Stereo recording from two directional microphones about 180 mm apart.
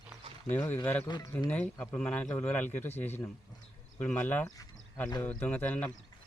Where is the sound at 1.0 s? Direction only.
25° left (ahead or behind).